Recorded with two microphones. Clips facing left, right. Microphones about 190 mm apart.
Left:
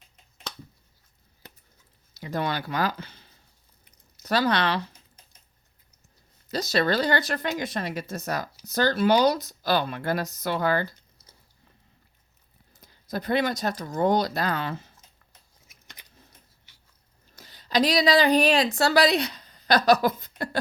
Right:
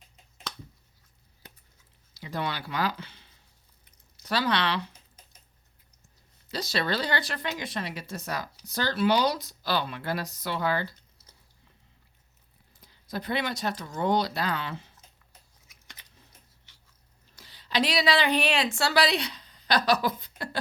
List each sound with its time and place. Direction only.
2.2 s speech: 45° left (ahead or behind)
6.5 s speech: 45° left (ahead or behind)
12.7 s speech: 45° left (ahead or behind)
17.3 s a woman's voice: 45° left (ahead or behind)